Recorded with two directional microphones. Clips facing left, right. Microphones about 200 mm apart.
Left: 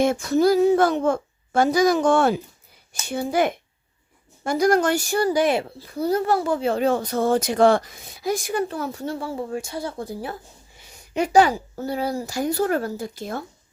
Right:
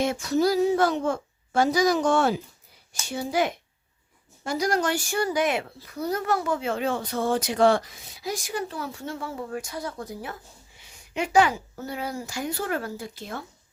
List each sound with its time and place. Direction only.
0.0 s a child's voice: 50° left (ahead or behind)